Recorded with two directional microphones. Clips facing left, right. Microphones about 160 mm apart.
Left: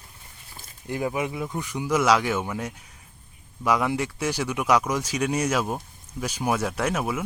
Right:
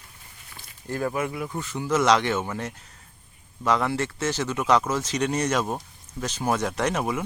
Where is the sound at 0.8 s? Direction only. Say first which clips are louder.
Even; 15° left (ahead or behind).